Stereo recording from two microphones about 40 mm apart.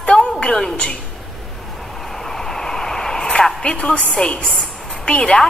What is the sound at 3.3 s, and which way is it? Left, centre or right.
Speech, left.